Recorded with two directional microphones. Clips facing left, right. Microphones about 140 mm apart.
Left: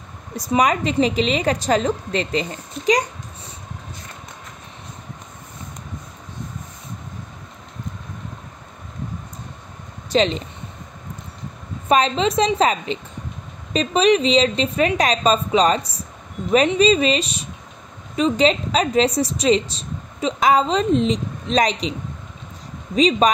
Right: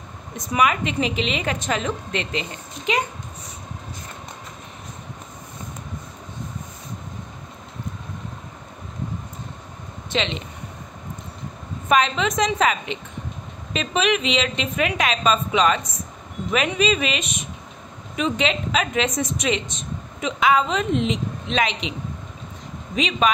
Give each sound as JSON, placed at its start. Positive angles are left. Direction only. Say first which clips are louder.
{"t": 0.4, "sound": "a woman's voice", "louder": "left 3 dB", "side_deg": 35}
{"t": 10.0, "sound": "speech", "louder": "left 7 dB", "side_deg": 40}
{"t": 11.9, "sound": "a woman's voice", "louder": "left 2 dB", "side_deg": 30}
{"t": 22.9, "sound": "a woman's voice", "louder": "left 5 dB", "side_deg": 35}